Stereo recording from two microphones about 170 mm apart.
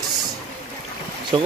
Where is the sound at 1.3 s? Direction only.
30° right (ahead or behind).